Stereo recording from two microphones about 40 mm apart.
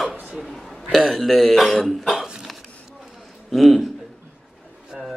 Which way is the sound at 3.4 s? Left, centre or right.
Centre.